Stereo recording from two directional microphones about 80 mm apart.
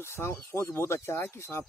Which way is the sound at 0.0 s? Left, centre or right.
Left.